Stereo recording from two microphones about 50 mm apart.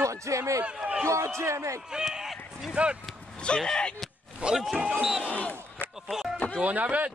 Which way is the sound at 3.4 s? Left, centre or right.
Centre.